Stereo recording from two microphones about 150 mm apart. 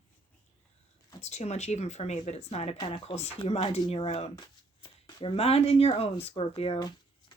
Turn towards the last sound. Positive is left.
turn(degrees=40)  # may be behind; listen again after turning